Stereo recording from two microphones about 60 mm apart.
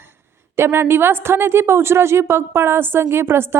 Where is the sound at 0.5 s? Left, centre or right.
Right.